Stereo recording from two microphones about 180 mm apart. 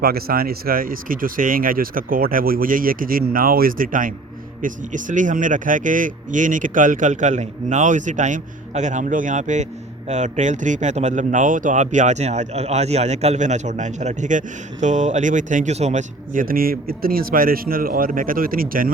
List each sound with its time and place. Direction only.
0.0 s speech: 55° right (ahead or behind)